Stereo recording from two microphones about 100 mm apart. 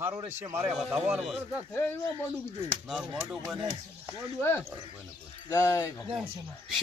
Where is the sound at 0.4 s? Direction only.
25° right (ahead or behind).